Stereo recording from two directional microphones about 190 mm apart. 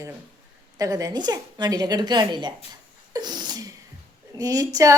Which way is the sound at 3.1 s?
20° right (ahead or behind).